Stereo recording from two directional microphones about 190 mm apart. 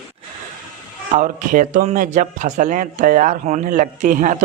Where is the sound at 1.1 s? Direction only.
40° right (ahead or behind).